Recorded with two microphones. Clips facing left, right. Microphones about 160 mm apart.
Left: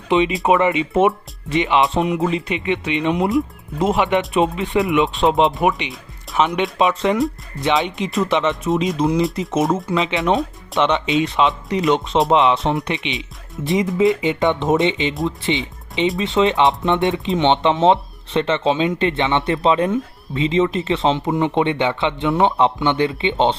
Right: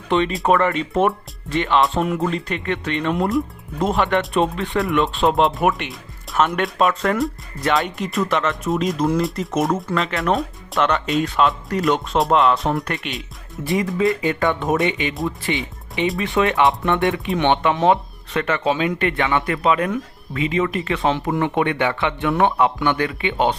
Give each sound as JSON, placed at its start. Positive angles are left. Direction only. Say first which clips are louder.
{"t": 0.1, "sound": "speech", "louder": "left 2 dB", "side_deg": 5}
{"t": 13.7, "sound": "speech", "louder": "left 3 dB", "side_deg": 20}